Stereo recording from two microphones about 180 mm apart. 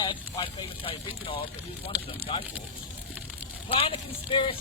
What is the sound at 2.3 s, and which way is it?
Speech, 30° left (ahead or behind).